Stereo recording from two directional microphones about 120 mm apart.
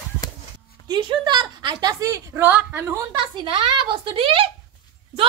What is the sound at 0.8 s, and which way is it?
A woman's voice, 40° right (ahead or behind).